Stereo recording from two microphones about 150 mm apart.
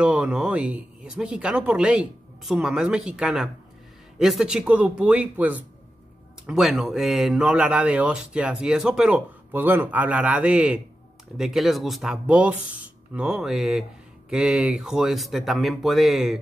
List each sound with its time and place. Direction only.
0.0 s speech: 5° right (ahead or behind)